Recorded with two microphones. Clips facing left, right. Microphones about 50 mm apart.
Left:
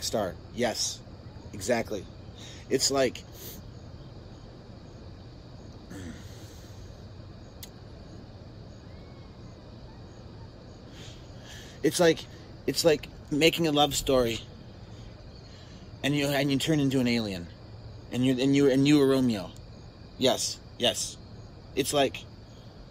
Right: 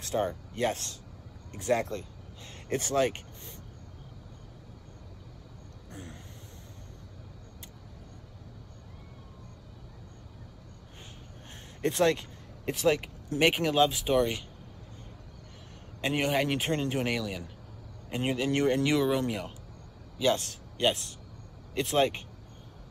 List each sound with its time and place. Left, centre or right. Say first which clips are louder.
0.0 s a man's voice: even; right
5.9 s vehicle: left 3 dB; right
11.8 s speech: left 3 dB; right
16.0 s a man's voice: left 1 dB; right